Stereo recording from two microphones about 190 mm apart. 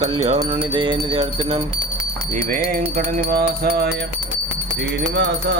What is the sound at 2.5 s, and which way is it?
Speech, 45° right (ahead or behind).